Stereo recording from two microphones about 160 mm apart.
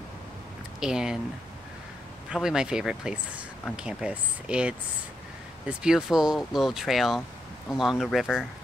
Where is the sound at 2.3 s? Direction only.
5° right (ahead or behind).